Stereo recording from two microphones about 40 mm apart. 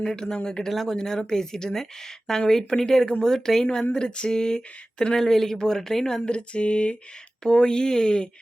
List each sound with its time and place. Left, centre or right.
0.0 s speech: centre
0.7 s speech: centre
3.9 s speech: left
6.3 s speech: left